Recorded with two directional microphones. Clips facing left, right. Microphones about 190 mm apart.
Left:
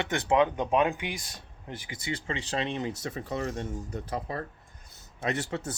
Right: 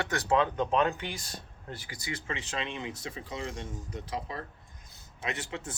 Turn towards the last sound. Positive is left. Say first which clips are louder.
# left 6 dB
turn(degrees=40)  # may be behind; listen again after turning